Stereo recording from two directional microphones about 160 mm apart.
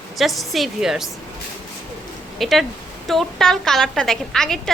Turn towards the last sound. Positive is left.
turn(degrees=5)  # may be behind; listen again after turning